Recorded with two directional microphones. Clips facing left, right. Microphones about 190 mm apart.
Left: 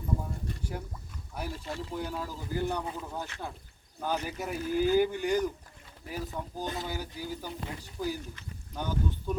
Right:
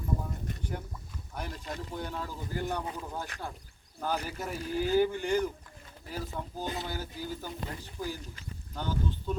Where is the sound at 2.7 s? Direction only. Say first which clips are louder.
Left 1 dB; 15° left (ahead or behind).